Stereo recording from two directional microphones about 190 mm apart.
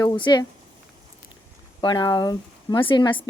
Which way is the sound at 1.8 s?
25° left (ahead or behind).